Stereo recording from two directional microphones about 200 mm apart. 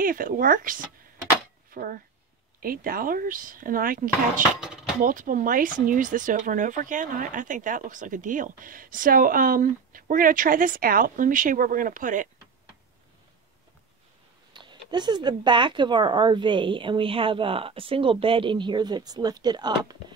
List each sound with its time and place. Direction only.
0.0 s speech: 45° right (ahead or behind)
14.5 s speech: 20° right (ahead or behind)